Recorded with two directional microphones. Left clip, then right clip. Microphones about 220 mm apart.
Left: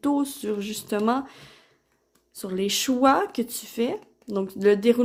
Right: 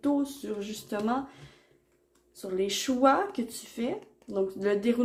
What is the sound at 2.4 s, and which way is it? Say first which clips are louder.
Speech: left 4 dB; 45° left (ahead or behind).